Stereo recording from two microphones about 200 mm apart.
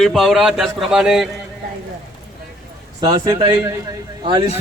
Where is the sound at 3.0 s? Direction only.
20° right (ahead or behind).